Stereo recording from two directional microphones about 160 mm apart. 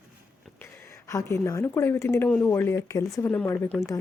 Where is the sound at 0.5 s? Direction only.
15° left (ahead or behind).